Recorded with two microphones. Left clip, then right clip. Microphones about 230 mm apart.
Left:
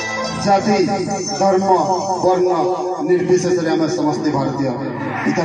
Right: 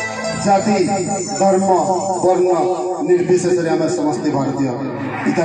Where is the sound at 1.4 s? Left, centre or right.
Right.